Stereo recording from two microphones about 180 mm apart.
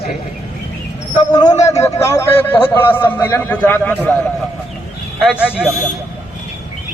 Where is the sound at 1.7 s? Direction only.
15° left (ahead or behind).